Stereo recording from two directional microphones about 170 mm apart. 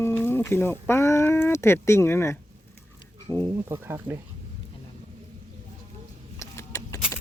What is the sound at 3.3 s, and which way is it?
Speech, 20° left (ahead or behind).